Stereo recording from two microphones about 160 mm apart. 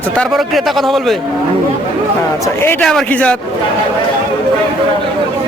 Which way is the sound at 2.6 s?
15° left (ahead or behind).